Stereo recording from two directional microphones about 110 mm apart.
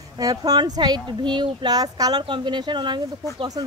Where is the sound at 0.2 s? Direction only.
35° right (ahead or behind).